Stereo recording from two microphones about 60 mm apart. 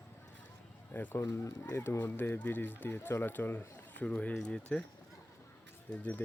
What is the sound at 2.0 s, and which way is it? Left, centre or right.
Speech, left.